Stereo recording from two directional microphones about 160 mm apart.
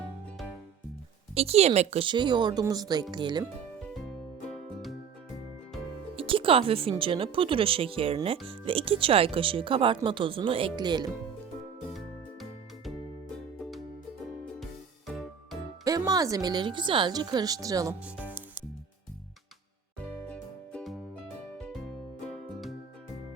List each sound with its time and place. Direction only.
1.4 s speech: 40° right (ahead or behind)
4.4 s music: centre (ahead or behind)
6.1 s speech: 35° right (ahead or behind)
11.9 s music: centre (ahead or behind)
15.8 s speech: 20° right (ahead or behind)
18.0 s music: 10° right (ahead or behind)
20.2 s music: 10° left (ahead or behind)